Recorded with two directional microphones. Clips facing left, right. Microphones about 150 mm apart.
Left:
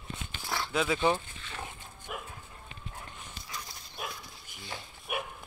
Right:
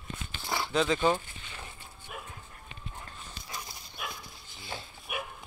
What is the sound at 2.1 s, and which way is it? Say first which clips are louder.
Dog: left 3 dB; 75° left (ahead or behind).